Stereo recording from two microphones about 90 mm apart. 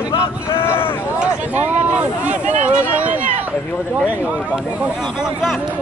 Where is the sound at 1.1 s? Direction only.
10° right (ahead or behind).